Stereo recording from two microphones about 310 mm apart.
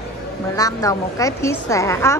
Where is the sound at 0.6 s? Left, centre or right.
Centre.